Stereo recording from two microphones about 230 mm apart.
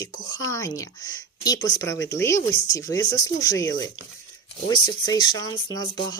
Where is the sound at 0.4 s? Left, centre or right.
Centre.